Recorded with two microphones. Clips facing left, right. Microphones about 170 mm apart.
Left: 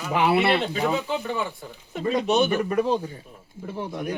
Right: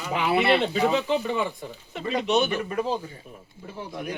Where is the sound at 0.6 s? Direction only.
10° left (ahead or behind).